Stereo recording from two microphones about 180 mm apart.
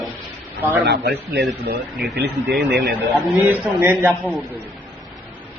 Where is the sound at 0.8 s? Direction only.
60° right (ahead or behind).